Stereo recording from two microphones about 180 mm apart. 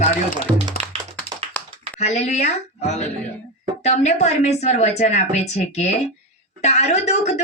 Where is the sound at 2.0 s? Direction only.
40° left (ahead or behind).